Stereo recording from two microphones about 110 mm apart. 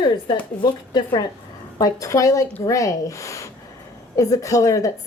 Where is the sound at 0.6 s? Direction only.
40° left (ahead or behind).